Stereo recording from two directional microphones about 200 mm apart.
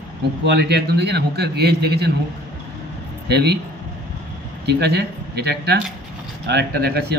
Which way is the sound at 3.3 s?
55° right (ahead or behind).